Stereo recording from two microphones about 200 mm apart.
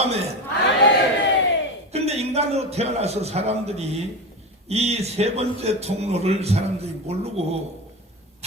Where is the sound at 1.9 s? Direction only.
30° right (ahead or behind).